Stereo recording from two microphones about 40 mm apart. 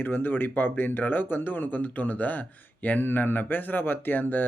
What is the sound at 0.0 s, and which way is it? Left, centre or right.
Speech, left.